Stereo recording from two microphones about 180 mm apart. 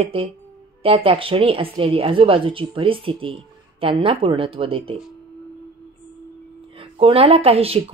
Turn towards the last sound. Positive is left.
turn(degrees=-35)  # may be behind; listen again after turning